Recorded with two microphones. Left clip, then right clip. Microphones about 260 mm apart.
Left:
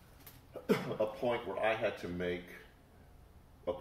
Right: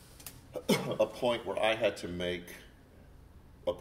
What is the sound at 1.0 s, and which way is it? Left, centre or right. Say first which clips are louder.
Speech: right 4 dB; right.